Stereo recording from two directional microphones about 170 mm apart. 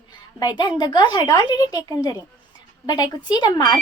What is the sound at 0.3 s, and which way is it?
A woman's voice, 25° left (ahead or behind).